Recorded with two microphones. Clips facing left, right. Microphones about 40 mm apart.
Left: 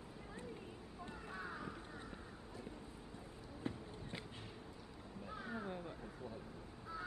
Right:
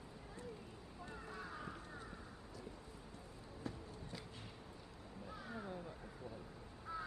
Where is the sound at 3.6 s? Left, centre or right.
Left.